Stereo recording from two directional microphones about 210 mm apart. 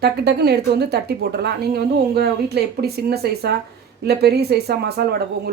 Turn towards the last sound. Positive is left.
turn(degrees=-50)  # may be behind; listen again after turning